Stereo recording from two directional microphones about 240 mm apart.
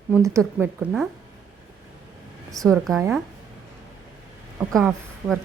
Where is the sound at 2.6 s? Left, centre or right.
Centre.